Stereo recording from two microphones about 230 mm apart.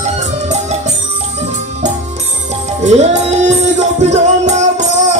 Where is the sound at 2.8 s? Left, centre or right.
Right.